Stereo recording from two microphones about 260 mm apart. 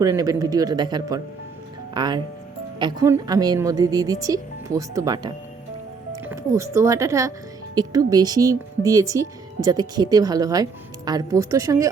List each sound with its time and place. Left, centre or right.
0.0 s speech: centre